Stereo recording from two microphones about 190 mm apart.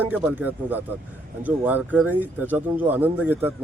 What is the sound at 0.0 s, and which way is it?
Speech, 10° right (ahead or behind).